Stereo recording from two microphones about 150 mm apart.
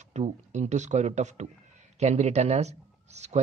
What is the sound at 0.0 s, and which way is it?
Speech, 50° right (ahead or behind).